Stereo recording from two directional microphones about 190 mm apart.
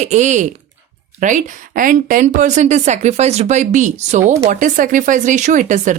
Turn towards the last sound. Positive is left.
turn(degrees=-40)  # may be behind; listen again after turning